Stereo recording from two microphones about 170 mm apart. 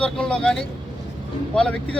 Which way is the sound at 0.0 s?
5° left (ahead or behind).